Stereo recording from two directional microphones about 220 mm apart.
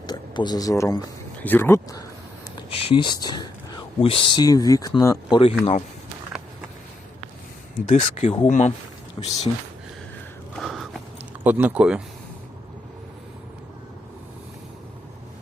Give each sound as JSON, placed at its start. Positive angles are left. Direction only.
{"t": 0.1, "sound": "speech", "side_deg": 20}
{"t": 2.6, "sound": "speech", "side_deg": 25}
{"t": 7.9, "sound": "speech", "side_deg": 30}
{"t": 9.2, "sound": "speech", "side_deg": 20}
{"t": 10.5, "sound": "a sound", "side_deg": 0}
{"t": 11.4, "sound": "speech", "side_deg": -10}